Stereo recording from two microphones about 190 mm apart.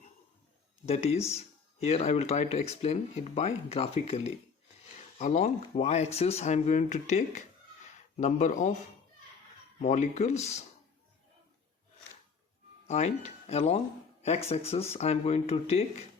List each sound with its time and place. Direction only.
0.9 s speech: 35° left (ahead or behind)
9.8 s speech: 35° left (ahead or behind)
12.9 s speech: 35° left (ahead or behind)